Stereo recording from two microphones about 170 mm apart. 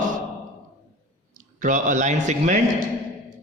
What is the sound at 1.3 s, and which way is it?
Speech, 50° right (ahead or behind).